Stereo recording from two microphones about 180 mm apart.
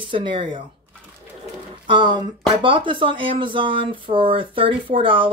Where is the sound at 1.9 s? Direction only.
25° right (ahead or behind).